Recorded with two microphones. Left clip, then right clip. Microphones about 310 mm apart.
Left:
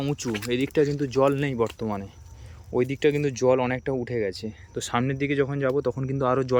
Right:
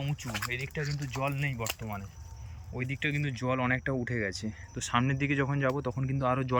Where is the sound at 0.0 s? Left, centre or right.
Centre.